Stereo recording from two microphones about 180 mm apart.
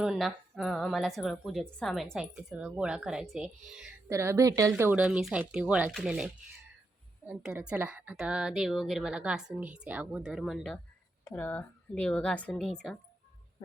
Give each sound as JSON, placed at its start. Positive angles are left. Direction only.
{"t": 0.0, "sound": "a woman's voice", "side_deg": 0}
{"t": 4.1, "sound": "a woman's voice", "side_deg": -15}
{"t": 11.3, "sound": "a woman's voice", "side_deg": 10}